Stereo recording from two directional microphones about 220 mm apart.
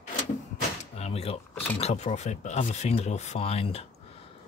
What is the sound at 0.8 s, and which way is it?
Door, 30° left (ahead or behind).